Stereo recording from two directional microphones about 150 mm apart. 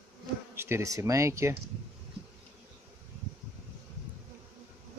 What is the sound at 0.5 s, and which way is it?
Speech, 15° right (ahead or behind).